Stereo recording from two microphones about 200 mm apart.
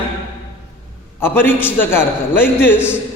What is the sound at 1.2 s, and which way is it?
A man's voice, 10° left (ahead or behind).